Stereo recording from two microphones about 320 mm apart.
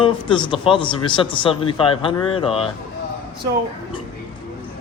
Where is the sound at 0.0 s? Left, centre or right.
Centre.